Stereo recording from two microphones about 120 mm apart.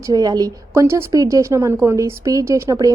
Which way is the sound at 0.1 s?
35° right (ahead or behind).